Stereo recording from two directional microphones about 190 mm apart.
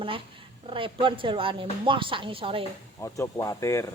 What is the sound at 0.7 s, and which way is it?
Speech, 25° right (ahead or behind).